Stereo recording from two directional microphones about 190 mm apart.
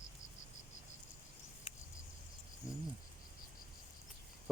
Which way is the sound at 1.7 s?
30° left (ahead or behind).